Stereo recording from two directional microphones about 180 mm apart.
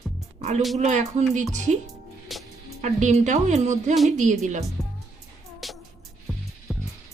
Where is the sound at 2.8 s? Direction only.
40° right (ahead or behind).